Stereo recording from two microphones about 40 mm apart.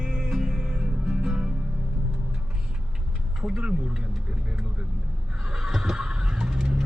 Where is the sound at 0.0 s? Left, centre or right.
Centre.